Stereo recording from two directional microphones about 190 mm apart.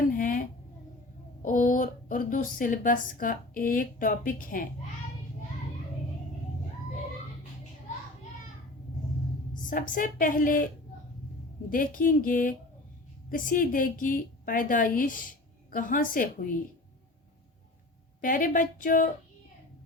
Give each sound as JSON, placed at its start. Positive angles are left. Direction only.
{"t": 0.2, "sound": "a sound", "side_deg": 45}
{"t": 1.4, "sound": "speech", "side_deg": 45}
{"t": 9.6, "sound": "a woman's voice", "side_deg": 45}
{"t": 11.7, "sound": "a woman's voice", "side_deg": 45}
{"t": 18.2, "sound": "a woman's voice", "side_deg": 45}